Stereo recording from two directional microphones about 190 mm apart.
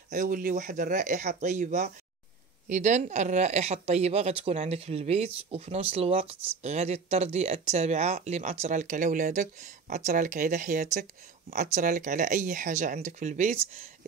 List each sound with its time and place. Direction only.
0.1 s speech: 45° right (ahead or behind)